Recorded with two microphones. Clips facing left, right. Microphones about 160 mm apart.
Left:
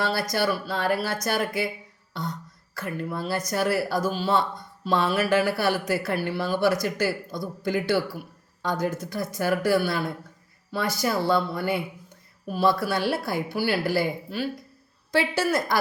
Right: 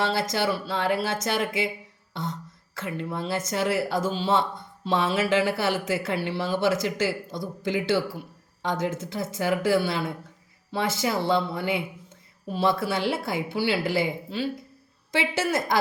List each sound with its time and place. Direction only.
0.0 s speech: 20° right (ahead or behind)